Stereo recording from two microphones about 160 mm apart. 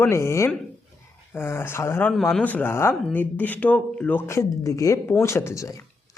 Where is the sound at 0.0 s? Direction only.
15° left (ahead or behind).